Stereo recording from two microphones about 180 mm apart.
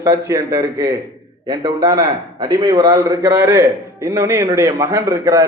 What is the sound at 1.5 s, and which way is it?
Speech, 30° right (ahead or behind).